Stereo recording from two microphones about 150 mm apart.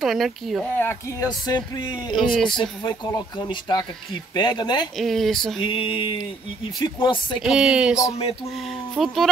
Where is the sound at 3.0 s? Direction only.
25° left (ahead or behind).